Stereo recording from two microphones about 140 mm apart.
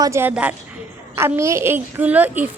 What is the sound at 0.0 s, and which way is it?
A child's voice, 20° right (ahead or behind).